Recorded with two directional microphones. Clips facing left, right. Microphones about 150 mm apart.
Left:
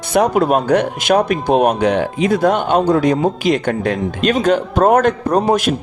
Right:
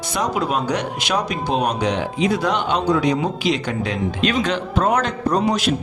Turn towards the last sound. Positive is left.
turn(degrees=50)  # may be behind; listen again after turning